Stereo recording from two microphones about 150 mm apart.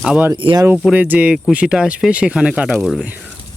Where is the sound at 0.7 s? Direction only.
5° right (ahead or behind).